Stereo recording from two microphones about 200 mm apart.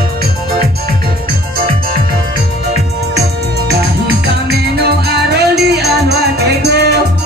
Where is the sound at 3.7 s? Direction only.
55° right (ahead or behind).